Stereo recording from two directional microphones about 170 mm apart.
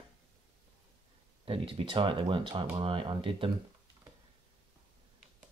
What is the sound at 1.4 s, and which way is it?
Speech, 30° right (ahead or behind).